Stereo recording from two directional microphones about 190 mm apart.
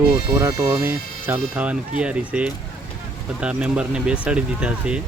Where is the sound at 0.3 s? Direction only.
20° right (ahead or behind).